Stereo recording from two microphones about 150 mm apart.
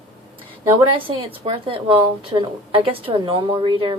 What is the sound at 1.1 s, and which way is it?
A woman's voice, 35° right (ahead or behind).